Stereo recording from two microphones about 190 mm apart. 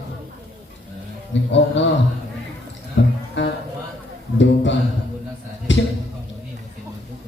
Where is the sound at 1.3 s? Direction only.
75° left (ahead or behind).